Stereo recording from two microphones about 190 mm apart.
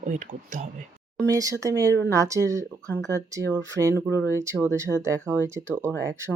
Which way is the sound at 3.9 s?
15° left (ahead or behind).